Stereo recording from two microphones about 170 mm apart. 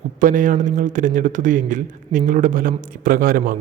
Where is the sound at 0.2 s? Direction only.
50° right (ahead or behind).